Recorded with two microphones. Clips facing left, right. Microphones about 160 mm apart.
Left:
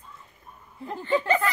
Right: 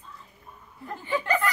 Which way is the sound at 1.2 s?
25° left (ahead or behind).